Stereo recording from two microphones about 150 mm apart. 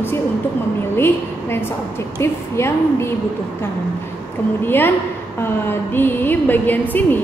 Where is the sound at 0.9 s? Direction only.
15° left (ahead or behind).